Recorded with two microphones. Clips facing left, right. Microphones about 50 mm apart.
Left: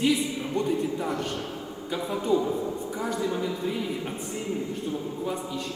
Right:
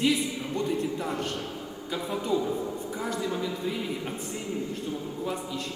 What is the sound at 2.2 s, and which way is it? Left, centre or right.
Speech, left.